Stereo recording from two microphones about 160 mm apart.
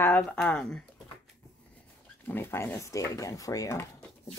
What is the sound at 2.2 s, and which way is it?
Speech, 15° left (ahead or behind).